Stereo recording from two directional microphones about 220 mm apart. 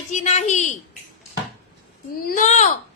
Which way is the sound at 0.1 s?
30° left (ahead or behind).